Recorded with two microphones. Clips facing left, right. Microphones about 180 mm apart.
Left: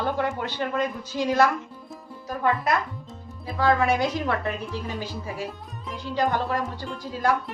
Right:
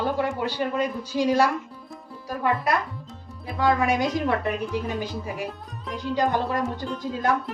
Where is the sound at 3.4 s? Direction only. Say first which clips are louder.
Even; 15° right (ahead or behind).